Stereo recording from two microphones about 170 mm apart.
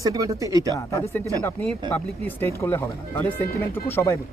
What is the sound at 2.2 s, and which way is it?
Speech, 15° left (ahead or behind).